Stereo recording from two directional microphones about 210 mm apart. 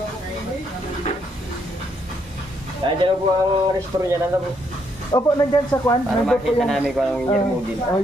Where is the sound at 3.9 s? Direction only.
20° right (ahead or behind).